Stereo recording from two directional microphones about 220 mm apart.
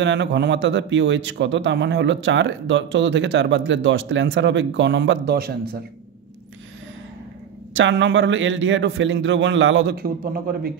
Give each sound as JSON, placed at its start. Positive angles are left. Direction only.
{"t": 0.0, "sound": "a man's voice", "side_deg": -55}
{"t": 7.7, "sound": "a man's voice", "side_deg": -55}